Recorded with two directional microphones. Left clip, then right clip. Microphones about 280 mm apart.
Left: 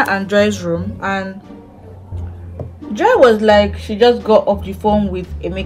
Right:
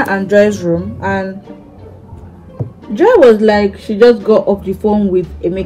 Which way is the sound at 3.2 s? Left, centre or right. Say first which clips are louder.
Right 2 dB; left.